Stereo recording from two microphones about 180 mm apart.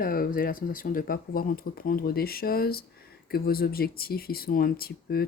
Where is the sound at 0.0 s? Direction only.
50° left (ahead or behind).